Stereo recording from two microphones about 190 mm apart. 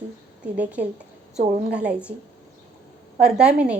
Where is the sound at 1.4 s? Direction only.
40° right (ahead or behind).